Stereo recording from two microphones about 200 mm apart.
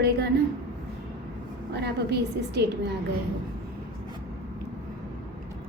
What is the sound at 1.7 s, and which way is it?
Speech, 55° right (ahead or behind).